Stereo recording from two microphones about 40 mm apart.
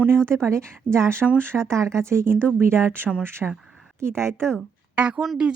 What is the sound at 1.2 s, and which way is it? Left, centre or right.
Speech, centre.